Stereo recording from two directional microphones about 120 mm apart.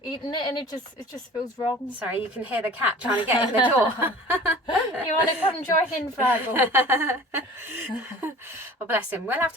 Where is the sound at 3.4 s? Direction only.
40° left (ahead or behind).